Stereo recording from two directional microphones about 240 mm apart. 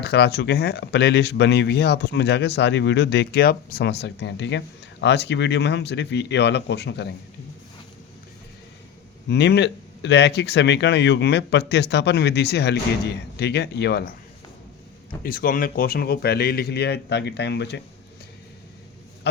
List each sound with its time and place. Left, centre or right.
0.0 s speech: left
9.3 s speech: left
15.2 s a man's voice: left